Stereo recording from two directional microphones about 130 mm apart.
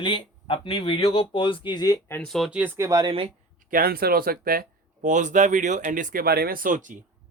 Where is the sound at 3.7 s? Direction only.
90° right.